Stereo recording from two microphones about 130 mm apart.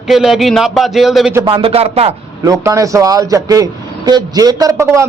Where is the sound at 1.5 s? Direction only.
45° right (ahead or behind).